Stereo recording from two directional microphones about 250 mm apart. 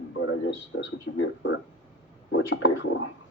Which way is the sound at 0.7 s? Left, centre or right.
Left.